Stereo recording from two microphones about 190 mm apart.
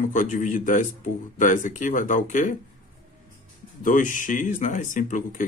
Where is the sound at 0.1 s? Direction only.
45° left (ahead or behind).